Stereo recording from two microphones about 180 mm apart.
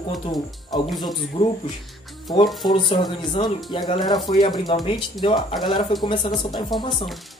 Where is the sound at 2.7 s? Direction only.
25° left (ahead or behind).